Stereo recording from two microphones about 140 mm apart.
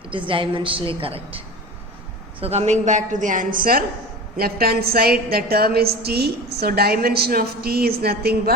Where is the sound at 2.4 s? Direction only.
50° right (ahead or behind).